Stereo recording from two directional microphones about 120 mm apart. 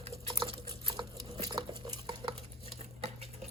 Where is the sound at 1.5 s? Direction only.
30° right (ahead or behind).